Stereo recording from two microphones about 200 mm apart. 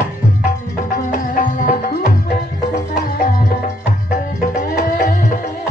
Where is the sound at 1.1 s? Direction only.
40° left (ahead or behind).